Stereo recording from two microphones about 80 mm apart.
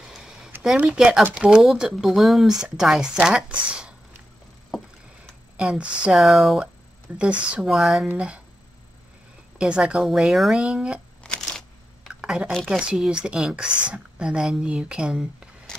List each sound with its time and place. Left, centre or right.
0.0 s a sound: centre
0.7 s speech: centre
5.6 s speech: centre
6.1 s speech: centre
7.1 s speech: centre
7.6 s speech: centre
8.1 s speech: centre
9.6 s speech: centre
12.1 s a sound: centre
12.6 s speech: centre